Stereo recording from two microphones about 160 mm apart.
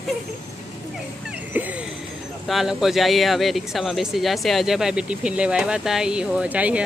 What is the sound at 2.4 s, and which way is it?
Speech, centre (ahead or behind).